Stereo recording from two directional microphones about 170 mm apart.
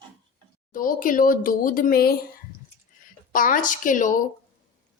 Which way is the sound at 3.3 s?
50° left (ahead or behind).